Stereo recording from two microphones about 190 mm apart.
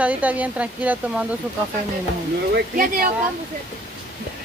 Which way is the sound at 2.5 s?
50° right (ahead or behind).